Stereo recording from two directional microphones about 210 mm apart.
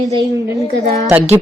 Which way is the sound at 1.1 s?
10° right (ahead or behind).